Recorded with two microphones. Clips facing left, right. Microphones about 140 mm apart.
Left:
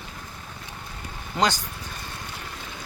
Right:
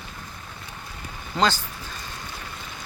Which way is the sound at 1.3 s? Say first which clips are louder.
Right 1 dB; 15° left (ahead or behind).